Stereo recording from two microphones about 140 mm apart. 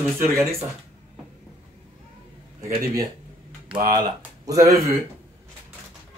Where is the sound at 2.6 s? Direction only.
25° right (ahead or behind).